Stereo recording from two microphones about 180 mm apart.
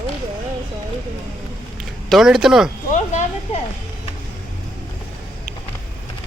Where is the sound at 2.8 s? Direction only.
40° left (ahead or behind).